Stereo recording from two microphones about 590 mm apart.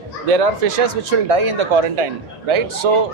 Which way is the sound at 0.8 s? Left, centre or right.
Right.